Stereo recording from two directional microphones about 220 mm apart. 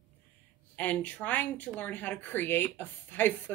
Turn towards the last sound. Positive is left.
turn(degrees=10)  # may be behind; listen again after turning